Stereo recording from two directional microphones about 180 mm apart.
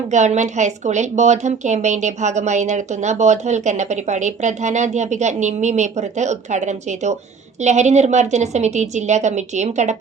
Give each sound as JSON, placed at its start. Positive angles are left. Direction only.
{"t": 0.1, "sound": "speech", "side_deg": -40}